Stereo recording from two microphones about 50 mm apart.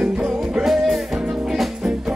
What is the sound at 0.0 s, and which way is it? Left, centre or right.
Music, centre.